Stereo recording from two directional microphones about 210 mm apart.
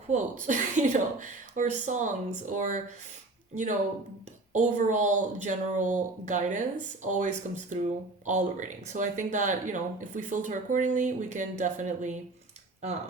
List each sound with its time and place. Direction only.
0.1 s speech: 35° right (ahead or behind)